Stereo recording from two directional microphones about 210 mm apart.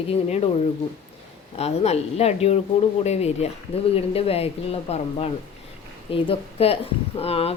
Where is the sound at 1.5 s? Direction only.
30° left (ahead or behind).